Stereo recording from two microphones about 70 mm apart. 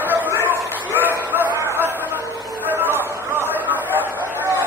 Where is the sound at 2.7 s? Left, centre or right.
Right.